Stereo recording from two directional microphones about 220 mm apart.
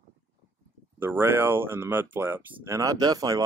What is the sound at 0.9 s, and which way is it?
Speech, 10° right (ahead or behind).